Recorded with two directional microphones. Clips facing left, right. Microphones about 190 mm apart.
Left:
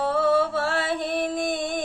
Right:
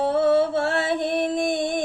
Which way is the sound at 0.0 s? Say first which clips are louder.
Right 3 dB; 20° right (ahead or behind).